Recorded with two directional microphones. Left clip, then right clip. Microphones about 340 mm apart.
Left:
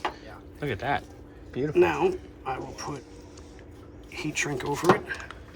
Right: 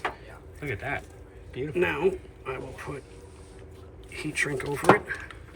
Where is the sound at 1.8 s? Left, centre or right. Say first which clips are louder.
Left 2 dB; centre.